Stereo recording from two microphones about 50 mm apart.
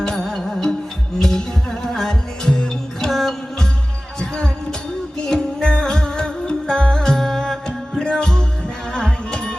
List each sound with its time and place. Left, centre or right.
0.0 s music: centre
3.1 s music: centre